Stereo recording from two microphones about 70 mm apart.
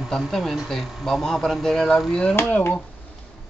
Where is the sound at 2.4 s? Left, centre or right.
Left.